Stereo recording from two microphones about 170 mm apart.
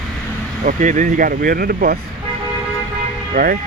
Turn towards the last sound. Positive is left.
turn(degrees=-60)  # may be behind; listen again after turning